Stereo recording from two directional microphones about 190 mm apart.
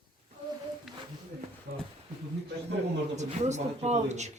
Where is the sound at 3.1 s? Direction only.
35° right (ahead or behind).